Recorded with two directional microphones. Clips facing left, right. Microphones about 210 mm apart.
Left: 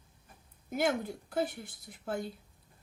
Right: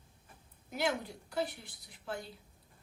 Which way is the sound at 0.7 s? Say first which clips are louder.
Left 4 dB; 50° left (ahead or behind).